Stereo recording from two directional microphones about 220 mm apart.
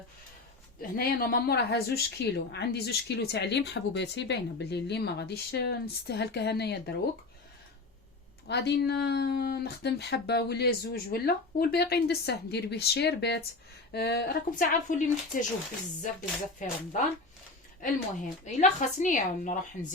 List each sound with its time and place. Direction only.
0.8 s speech: 45° left (ahead or behind)
8.4 s a woman's voice: 50° left (ahead or behind)
17.7 s a woman's voice: 35° left (ahead or behind)